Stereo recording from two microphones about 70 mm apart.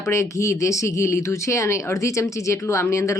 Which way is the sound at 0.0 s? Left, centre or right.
Left.